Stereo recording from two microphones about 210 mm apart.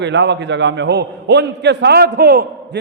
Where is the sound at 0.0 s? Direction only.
55° right (ahead or behind).